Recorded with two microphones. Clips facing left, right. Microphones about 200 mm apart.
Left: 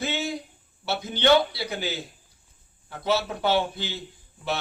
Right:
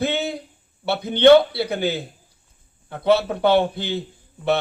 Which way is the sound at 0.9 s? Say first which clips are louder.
Right 9 dB; 60° right (ahead or behind).